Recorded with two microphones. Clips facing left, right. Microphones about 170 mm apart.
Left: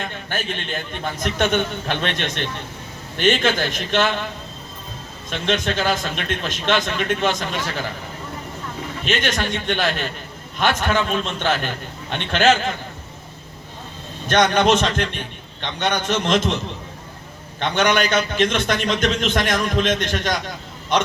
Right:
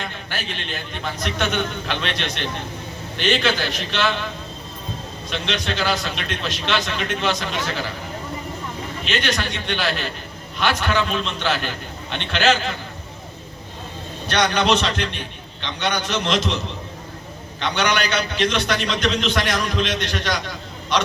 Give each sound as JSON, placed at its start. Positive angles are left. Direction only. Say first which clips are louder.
{"t": 0.3, "sound": "a man's voice", "louder": "left 3 dB", "side_deg": 50}
{"t": 5.3, "sound": "a man's voice", "louder": "left 4 dB", "side_deg": 45}
{"t": 9.0, "sound": "a man's voice", "louder": "left 2 dB", "side_deg": 45}
{"t": 14.3, "sound": "a man's voice", "louder": "left 3 dB", "side_deg": 45}
{"t": 17.6, "sound": "a man's voice", "louder": "left 3 dB", "side_deg": 45}